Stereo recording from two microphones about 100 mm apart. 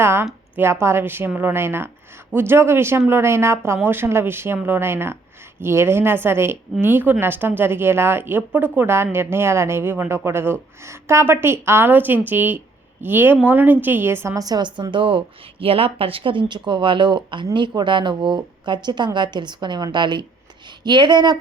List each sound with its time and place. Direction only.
0.0 s speech: 25° right (ahead or behind)
14.3 s a woman's voice: 40° right (ahead or behind)